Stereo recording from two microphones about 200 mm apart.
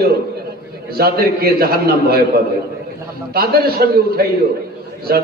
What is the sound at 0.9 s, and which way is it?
A man's voice, 50° right (ahead or behind).